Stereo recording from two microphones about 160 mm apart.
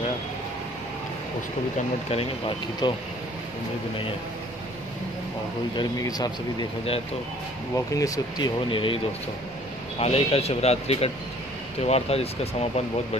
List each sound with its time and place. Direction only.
2.0 s speech: 35° left (ahead or behind)
5.8 s speech: 25° left (ahead or behind)
7.7 s speech: 20° left (ahead or behind); by 12.3 s 40° left (ahead or behind)